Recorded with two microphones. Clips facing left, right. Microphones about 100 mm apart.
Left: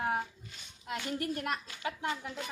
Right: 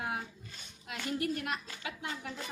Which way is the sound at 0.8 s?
45° left (ahead or behind).